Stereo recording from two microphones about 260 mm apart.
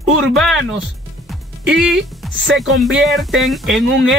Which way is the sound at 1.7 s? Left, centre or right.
Centre.